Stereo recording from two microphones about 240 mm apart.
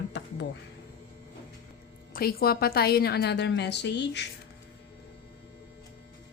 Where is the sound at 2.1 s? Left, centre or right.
Left.